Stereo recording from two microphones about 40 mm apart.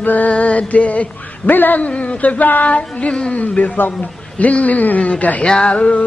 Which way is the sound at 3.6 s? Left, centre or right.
Left.